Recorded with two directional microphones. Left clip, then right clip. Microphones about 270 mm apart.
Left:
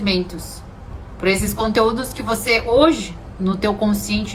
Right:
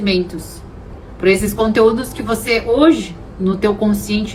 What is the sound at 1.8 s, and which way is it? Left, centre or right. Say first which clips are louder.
Speech: right 4 dB; centre.